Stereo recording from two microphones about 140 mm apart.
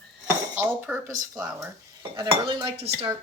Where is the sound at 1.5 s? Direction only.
30° right (ahead or behind).